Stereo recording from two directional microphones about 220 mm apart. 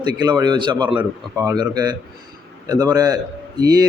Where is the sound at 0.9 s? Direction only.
10° right (ahead or behind).